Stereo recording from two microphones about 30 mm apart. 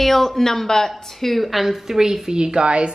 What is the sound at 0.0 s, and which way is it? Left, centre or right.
Speech, centre.